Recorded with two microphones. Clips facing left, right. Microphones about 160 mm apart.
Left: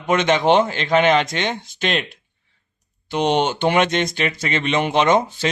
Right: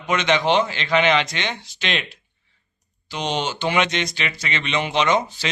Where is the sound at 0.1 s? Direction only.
50° left (ahead or behind).